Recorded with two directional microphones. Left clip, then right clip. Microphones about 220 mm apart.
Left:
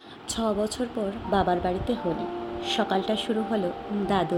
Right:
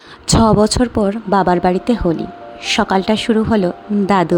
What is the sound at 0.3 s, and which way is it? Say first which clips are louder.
Speech: right 15 dB; 55° right (ahead or behind).